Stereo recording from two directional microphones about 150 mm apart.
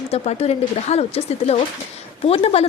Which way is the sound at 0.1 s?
45° left (ahead or behind).